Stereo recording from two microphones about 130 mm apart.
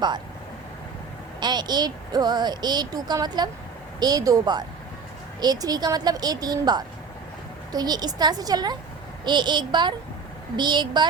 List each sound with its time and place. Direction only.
1.4 s a woman's voice: 35° right (ahead or behind)